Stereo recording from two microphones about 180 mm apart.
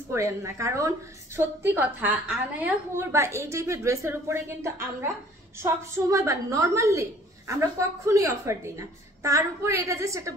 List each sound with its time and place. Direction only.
0.1 s a woman's voice: 15° right (ahead or behind)